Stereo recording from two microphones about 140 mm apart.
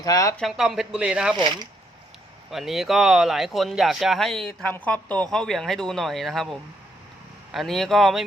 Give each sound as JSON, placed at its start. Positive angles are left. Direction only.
{"t": 0.0, "sound": "speech", "side_deg": 25}
{"t": 0.3, "sound": "speech", "side_deg": 0}
{"t": 1.4, "sound": "speech", "side_deg": -35}
{"t": 2.5, "sound": "speech", "side_deg": 0}